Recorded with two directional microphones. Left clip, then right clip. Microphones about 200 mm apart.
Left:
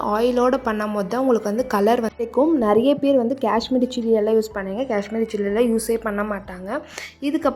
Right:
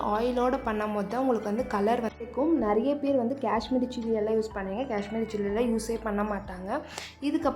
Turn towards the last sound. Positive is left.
turn(degrees=20)  # may be behind; listen again after turning